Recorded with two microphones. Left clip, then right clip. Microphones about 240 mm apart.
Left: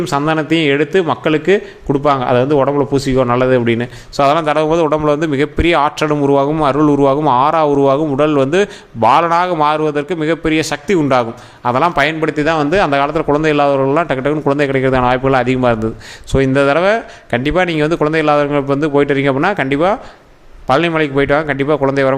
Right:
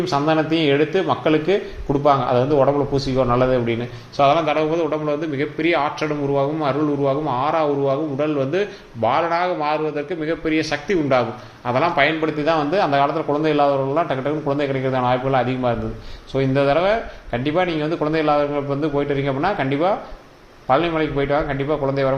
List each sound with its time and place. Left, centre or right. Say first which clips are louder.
0.0 s a man's voice: left 3 dB; left